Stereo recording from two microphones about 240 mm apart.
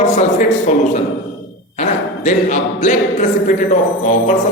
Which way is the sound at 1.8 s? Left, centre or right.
Left.